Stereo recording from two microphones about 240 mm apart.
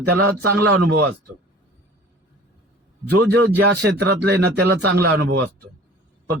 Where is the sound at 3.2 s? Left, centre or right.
Right.